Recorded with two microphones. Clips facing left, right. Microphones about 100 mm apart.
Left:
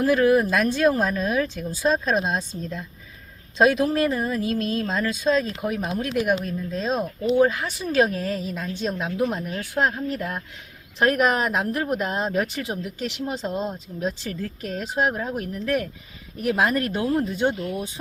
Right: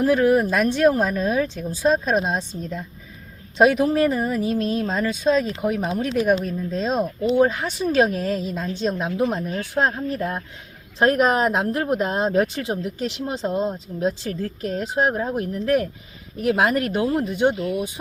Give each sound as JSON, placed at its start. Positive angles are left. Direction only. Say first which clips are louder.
{"t": 0.0, "sound": "speech", "louder": "right 1 dB", "side_deg": -5}
{"t": 5.9, "sound": "a woman's voice", "louder": "right 2 dB", "side_deg": -25}
{"t": 6.4, "sound": "speech", "louder": "right 3 dB", "side_deg": -5}
{"t": 7.5, "sound": "a woman's voice", "louder": "right 2 dB", "side_deg": -25}
{"t": 14.1, "sound": "speech", "louder": "right 4 dB", "side_deg": -35}
{"t": 14.7, "sound": "a woman's voice", "louder": "right 2 dB", "side_deg": -20}
{"t": 16.6, "sound": "a woman's voice", "louder": "right 2 dB", "side_deg": -15}